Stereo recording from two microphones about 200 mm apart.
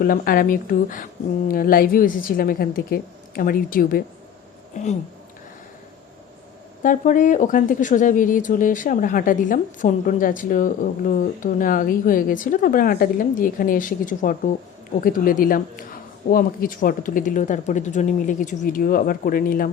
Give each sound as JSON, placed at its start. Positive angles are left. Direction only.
{"t": 0.0, "sound": "speech", "side_deg": 45}
{"t": 6.8, "sound": "speech", "side_deg": 40}